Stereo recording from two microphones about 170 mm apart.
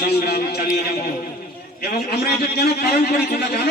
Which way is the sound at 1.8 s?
65° left (ahead or behind).